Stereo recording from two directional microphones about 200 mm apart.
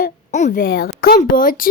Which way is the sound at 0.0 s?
35° left (ahead or behind).